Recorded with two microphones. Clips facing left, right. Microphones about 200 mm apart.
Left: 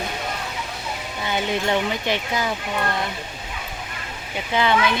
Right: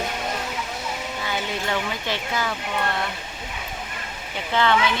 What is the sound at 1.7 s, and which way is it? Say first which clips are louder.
Speech: left 4 dB; 15° left (ahead or behind).